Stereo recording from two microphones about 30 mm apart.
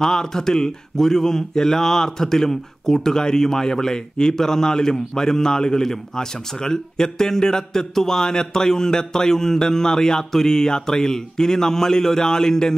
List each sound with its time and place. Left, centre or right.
0.0 s speech: centre